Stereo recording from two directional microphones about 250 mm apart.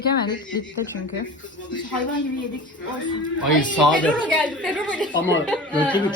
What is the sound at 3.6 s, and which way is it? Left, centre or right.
A woman's voice, centre.